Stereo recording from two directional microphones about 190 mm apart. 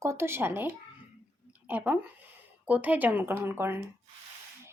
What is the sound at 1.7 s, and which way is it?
Speech, 10° right (ahead or behind).